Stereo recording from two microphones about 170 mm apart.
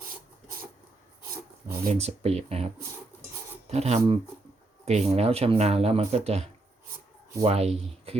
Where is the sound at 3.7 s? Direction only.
40° right (ahead or behind).